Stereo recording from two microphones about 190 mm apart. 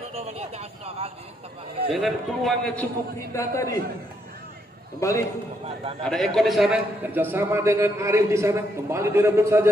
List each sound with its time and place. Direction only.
0.1 s a sound: 35° right (ahead or behind)
1.9 s a man's voice: centre (ahead or behind)
3.3 s a man's voice: 15° left (ahead or behind)
5.0 s a man's voice: 15° left (ahead or behind)
6.0 s a man's voice: centre (ahead or behind); by 9.7 s 15° right (ahead or behind)